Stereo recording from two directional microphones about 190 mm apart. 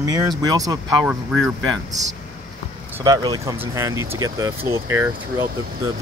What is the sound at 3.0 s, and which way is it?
Speech, 20° right (ahead or behind).